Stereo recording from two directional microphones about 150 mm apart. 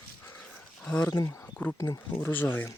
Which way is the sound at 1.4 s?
10° left (ahead or behind).